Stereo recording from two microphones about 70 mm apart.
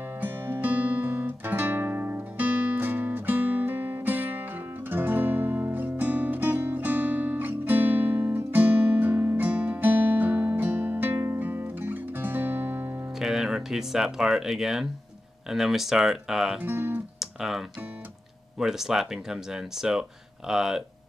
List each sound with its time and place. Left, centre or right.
0.2 s music: right
13.2 s speech: centre
16.5 s speech: right
17.2 s music: centre
18.6 s speech: centre